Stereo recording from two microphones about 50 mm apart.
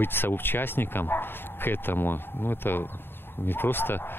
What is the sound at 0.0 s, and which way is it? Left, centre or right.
A man's voice, left.